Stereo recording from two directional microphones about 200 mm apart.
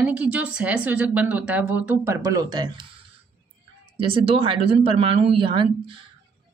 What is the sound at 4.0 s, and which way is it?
Speech, 25° right (ahead or behind).